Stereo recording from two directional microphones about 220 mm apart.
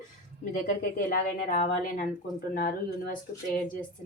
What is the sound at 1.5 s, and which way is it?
A woman's voice, 40° left (ahead or behind).